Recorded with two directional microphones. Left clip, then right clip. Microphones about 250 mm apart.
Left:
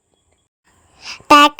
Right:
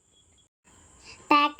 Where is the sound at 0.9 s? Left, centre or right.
Left.